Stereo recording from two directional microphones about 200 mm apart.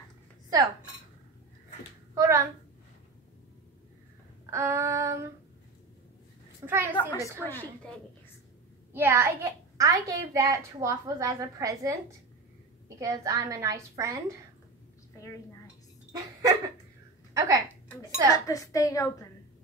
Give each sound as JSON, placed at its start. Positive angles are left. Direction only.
{"t": 2.1, "sound": "a woman's voice", "side_deg": -15}
{"t": 4.5, "sound": "a child's voice", "side_deg": -15}
{"t": 6.6, "sound": "a child's voice", "side_deg": -10}
{"t": 7.0, "sound": "speech", "side_deg": 15}
{"t": 8.9, "sound": "a child's voice", "side_deg": -10}
{"t": 15.1, "sound": "a woman's voice", "side_deg": 15}
{"t": 16.1, "sound": "speech", "side_deg": -20}
{"t": 17.3, "sound": "a sound", "side_deg": -15}
{"t": 18.3, "sound": "speech", "side_deg": 15}